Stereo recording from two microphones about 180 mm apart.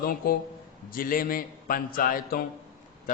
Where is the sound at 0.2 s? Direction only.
55° left (ahead or behind).